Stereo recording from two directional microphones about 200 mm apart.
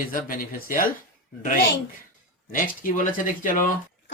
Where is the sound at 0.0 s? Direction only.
45° left (ahead or behind).